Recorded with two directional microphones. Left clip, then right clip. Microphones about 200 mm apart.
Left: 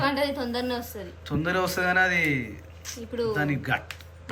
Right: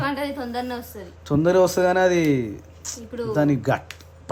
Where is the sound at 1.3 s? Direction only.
25° right (ahead or behind).